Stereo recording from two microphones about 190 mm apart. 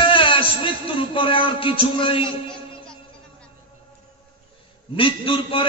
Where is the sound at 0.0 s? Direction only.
25° left (ahead or behind).